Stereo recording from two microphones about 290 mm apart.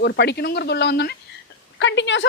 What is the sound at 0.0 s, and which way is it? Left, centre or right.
A woman's voice, left.